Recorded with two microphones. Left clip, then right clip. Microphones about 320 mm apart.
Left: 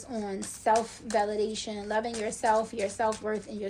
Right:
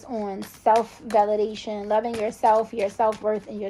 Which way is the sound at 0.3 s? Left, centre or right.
Centre.